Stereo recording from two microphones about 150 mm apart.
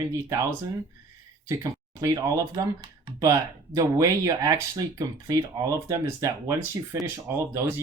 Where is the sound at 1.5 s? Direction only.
20° right (ahead or behind).